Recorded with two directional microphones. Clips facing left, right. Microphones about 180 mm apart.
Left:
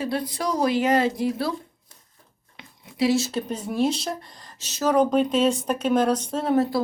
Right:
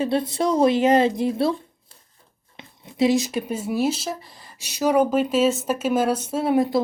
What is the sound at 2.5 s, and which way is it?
Speech, 20° right (ahead or behind).